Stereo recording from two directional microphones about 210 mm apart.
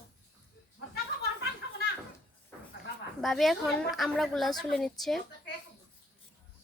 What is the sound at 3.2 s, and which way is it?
Speech, centre (ahead or behind).